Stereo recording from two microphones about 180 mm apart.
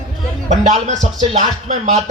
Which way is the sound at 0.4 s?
40° right (ahead or behind).